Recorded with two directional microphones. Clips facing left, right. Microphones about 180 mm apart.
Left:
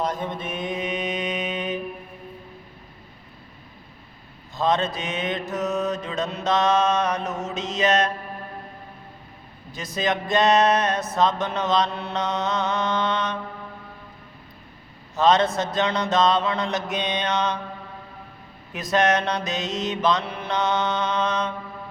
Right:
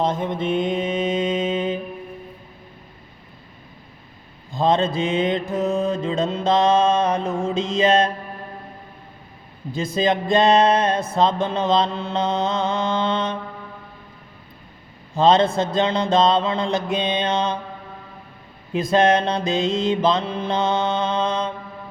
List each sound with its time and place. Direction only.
0.0 s mantra: 25° right (ahead or behind)
4.5 s mantra: 30° right (ahead or behind)
9.7 s mantra: 30° right (ahead or behind)
15.1 s a man's voice: 30° right (ahead or behind)
15.5 s mantra: 30° right (ahead or behind)
18.7 s mantra: 30° right (ahead or behind)